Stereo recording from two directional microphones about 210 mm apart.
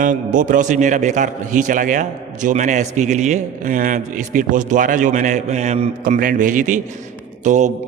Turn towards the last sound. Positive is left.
turn(degrees=-35)  # may be behind; listen again after turning